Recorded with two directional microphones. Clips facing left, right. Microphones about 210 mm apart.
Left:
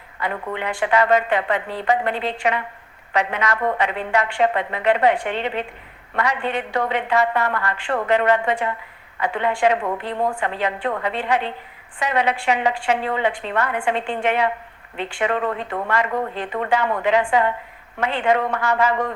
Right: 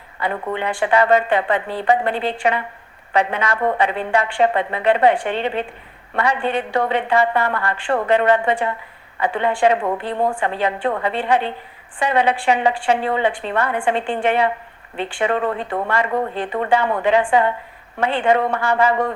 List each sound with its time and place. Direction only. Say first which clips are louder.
0.2 s a woman's voice: right 3 dB; 30° right (ahead or behind)